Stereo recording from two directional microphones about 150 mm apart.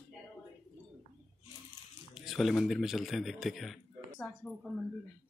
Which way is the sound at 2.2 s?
Centre (ahead or behind).